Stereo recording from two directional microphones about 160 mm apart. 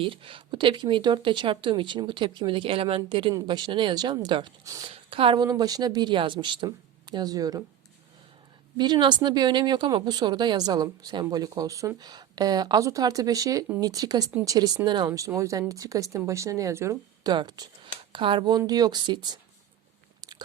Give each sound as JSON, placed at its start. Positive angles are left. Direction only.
{"t": 0.0, "sound": "speech", "side_deg": -35}
{"t": 4.9, "sound": "a woman's voice", "side_deg": -35}
{"t": 8.8, "sound": "speech", "side_deg": -30}